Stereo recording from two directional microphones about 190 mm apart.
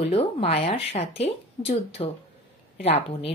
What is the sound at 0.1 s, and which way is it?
A woman's voice, 30° left (ahead or behind).